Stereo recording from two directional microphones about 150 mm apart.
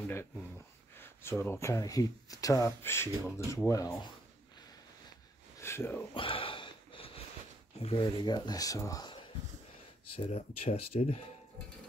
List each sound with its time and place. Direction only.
1.4 s speech: 15° left (ahead or behind)
5.6 s speech: 15° left (ahead or behind)
6.1 s a sound: 35° left (ahead or behind)
7.8 s speech: 35° left (ahead or behind)
10.1 s speech: 40° left (ahead or behind)